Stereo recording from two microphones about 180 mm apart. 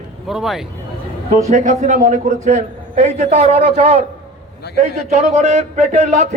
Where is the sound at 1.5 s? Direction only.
45° right (ahead or behind).